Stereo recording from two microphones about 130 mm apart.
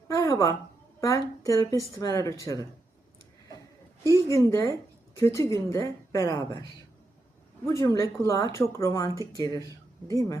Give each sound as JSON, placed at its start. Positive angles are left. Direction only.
{"t": 0.1, "sound": "a sound", "side_deg": 25}
{"t": 1.0, "sound": "speech", "side_deg": 25}
{"t": 4.1, "sound": "a woman's voice", "side_deg": 25}